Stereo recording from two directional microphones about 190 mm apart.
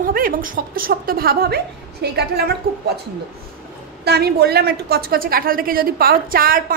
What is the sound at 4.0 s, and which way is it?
A woman's voice, 60° right (ahead or behind).